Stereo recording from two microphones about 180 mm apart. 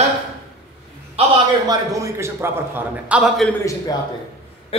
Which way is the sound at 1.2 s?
35° right (ahead or behind).